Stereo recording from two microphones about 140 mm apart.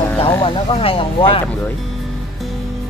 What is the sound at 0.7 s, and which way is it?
Speech, 40° left (ahead or behind).